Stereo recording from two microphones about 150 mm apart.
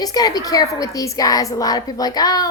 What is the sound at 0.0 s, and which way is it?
A woman's voice, 25° left (ahead or behind).